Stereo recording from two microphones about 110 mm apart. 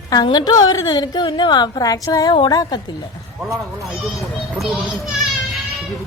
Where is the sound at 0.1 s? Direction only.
35° left (ahead or behind).